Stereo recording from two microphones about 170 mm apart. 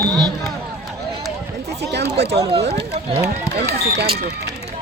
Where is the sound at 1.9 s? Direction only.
75° right (ahead or behind).